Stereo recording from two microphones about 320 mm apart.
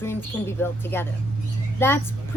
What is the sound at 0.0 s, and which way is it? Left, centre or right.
A woman's voice, centre.